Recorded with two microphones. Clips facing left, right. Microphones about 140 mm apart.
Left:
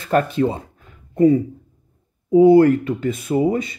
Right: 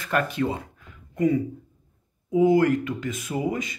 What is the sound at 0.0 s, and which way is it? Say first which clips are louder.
Speech: left 7 dB; 30° left (ahead or behind).